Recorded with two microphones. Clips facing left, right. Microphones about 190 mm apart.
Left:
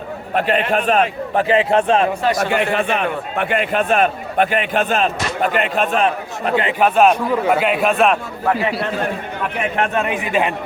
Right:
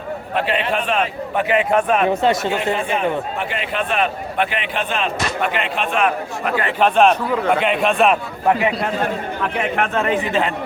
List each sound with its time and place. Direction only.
0.3 s a man's voice: 45° left (ahead or behind); by 2.0 s 30° left (ahead or behind)
2.2 s speech: 25° right (ahead or behind)
2.5 s a man's voice: 70° left (ahead or behind); by 6.5 s 35° left (ahead or behind)
6.6 s a man's voice: 15° left (ahead or behind)
6.8 s a man's voice: 5° left (ahead or behind)
9.9 s a man's voice: 15° left (ahead or behind)